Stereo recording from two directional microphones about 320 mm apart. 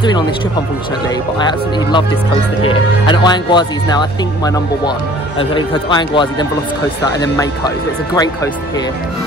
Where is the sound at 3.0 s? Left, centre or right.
Centre.